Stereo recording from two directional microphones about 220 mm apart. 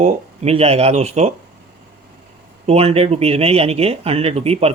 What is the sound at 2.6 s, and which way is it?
Speech, 25° right (ahead or behind).